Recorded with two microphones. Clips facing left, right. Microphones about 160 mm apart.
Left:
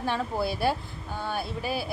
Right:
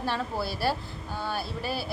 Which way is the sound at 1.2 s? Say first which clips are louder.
Left 1 dB; 5° right (ahead or behind).